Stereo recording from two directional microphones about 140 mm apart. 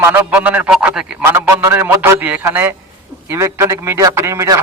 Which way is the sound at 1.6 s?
15° right (ahead or behind).